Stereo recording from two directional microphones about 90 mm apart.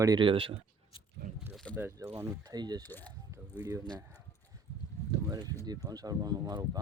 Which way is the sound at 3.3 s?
40° right (ahead or behind).